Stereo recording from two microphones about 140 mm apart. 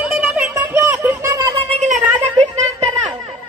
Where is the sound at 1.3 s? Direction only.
25° right (ahead or behind).